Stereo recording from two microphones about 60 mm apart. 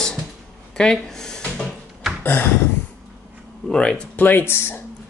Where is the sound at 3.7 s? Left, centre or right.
Centre.